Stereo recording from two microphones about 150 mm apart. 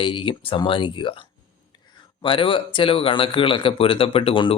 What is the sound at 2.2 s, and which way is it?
Speech, 35° left (ahead or behind).